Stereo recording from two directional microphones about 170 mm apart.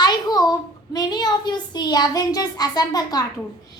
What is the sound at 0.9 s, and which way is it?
A child's voice, 25° left (ahead or behind).